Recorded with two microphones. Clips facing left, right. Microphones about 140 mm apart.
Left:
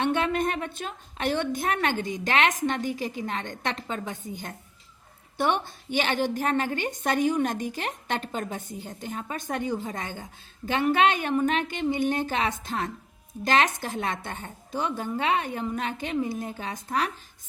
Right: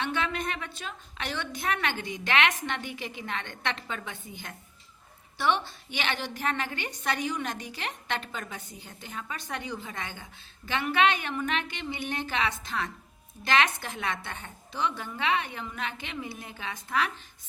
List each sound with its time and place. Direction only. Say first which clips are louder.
0.0 s a woman's voice: left 6 dB; 50° left (ahead or behind)